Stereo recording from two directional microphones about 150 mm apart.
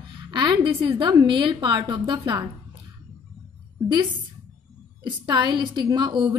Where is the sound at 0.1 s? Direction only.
35° right (ahead or behind).